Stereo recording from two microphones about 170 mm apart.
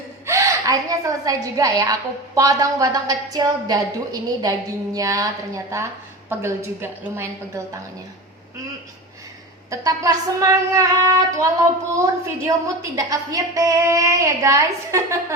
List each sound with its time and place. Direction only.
0.3 s a woman's voice: 20° right (ahead or behind)
9.6 s a woman's voice: 20° right (ahead or behind)
12.5 s a woman's voice: 20° right (ahead or behind)